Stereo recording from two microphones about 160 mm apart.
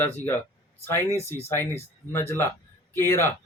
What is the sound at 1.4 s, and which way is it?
A man's voice, 15° left (ahead or behind).